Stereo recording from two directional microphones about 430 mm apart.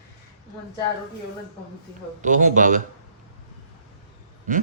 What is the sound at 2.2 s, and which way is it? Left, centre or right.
Speech, centre.